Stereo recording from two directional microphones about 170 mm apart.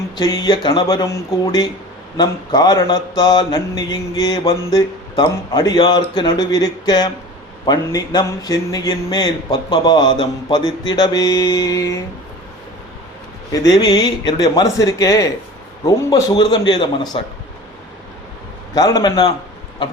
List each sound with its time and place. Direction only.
0.2 s mantra: 25° left (ahead or behind)
13.5 s mantra: 25° left (ahead or behind)
18.7 s mantra: 20° left (ahead or behind)